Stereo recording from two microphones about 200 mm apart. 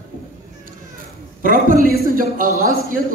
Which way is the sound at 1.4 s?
45° right (ahead or behind).